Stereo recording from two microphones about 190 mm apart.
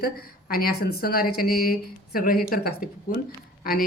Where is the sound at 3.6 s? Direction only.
50° left (ahead or behind).